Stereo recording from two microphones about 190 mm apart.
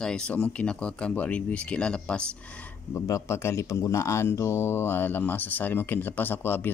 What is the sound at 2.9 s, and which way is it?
Speech, 15° left (ahead or behind).